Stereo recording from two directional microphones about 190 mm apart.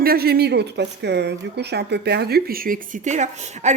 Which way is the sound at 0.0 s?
55° right (ahead or behind).